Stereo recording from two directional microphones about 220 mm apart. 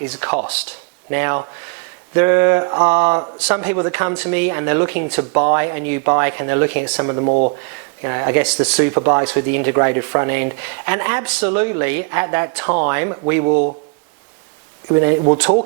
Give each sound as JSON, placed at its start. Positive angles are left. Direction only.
{"t": 0.0, "sound": "speech", "side_deg": -10}
{"t": 7.0, "sound": "speech", "side_deg": -20}
{"t": 7.3, "sound": "speech", "side_deg": -35}
{"t": 8.0, "sound": "speech", "side_deg": -15}
{"t": 13.5, "sound": "speech", "side_deg": -35}